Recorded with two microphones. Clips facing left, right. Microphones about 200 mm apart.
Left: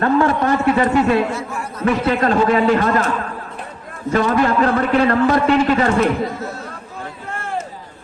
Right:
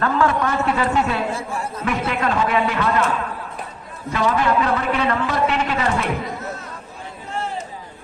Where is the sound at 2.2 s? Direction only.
40° left (ahead or behind).